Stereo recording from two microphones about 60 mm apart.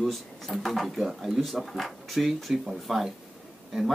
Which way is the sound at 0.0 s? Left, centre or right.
Centre.